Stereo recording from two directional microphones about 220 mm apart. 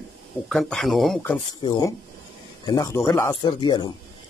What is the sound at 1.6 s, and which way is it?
Speech, 20° left (ahead or behind).